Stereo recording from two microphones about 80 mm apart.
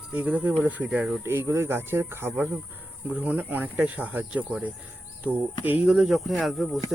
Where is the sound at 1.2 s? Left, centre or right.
Right.